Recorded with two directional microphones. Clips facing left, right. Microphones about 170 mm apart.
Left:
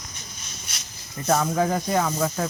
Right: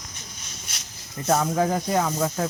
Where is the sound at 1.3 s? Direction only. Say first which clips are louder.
Even; 20° right (ahead or behind).